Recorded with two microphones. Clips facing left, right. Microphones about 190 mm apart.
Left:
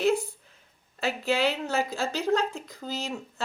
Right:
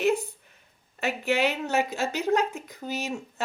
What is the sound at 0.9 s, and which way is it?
Speech, 20° right (ahead or behind).